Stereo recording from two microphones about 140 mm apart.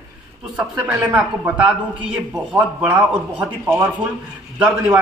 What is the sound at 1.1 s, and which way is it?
A man's voice, 10° right (ahead or behind).